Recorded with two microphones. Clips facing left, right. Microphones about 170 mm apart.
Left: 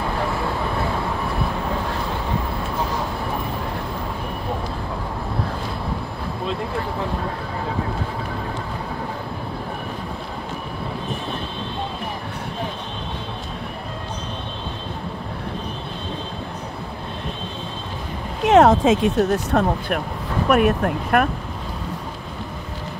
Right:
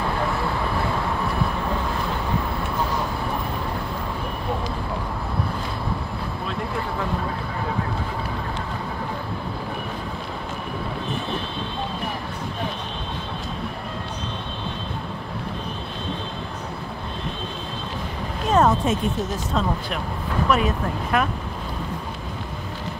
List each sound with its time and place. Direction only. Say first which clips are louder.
18.4 s speech: left 6 dB; 80° left; by 21.3 s 60° left (ahead or behind)